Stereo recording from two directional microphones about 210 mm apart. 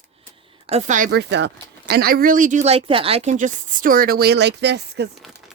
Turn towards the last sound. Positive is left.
turn(degrees=-55)  # may be behind; listen again after turning